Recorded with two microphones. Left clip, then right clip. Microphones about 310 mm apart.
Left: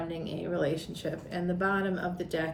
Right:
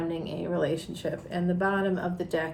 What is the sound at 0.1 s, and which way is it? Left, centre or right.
A woman's voice, centre.